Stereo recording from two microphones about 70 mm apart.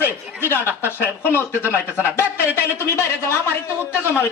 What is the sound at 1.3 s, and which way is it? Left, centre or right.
Speech, left.